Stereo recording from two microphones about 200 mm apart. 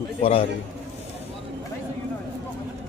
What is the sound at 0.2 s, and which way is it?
Speech, 30° left (ahead or behind).